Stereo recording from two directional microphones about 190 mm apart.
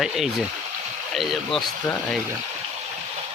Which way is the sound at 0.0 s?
Centre (ahead or behind).